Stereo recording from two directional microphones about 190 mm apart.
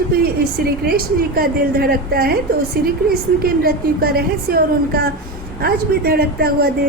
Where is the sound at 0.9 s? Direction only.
50° right (ahead or behind).